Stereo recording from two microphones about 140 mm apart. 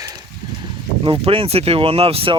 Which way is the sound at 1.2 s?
45° right (ahead or behind).